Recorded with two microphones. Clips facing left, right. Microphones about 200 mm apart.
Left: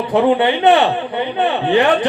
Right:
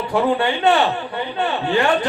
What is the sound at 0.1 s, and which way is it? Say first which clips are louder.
A man's voice: left 5 dB; 20° left (ahead or behind).